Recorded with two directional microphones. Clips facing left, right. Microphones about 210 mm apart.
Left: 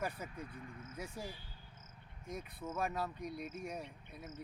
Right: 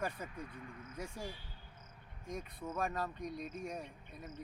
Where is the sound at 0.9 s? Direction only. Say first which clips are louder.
Right 1 dB; 5° left (ahead or behind).